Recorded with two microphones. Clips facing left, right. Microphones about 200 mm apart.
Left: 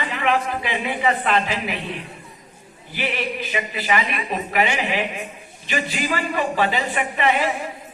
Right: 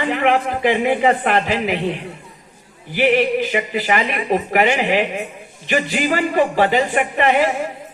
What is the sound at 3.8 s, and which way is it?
A man's voice, 55° right (ahead or behind).